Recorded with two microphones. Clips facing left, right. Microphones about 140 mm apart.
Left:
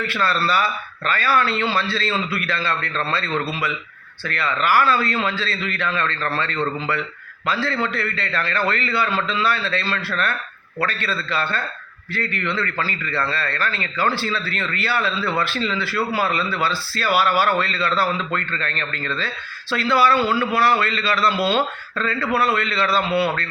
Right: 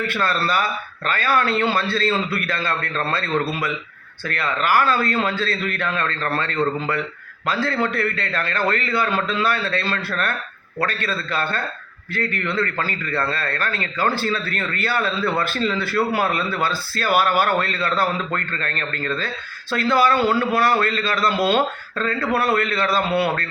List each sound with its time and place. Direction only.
0.1 s a man's voice: 45° right (ahead or behind)